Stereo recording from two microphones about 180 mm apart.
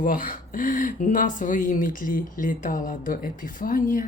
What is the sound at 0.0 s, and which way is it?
Speech, 50° left (ahead or behind).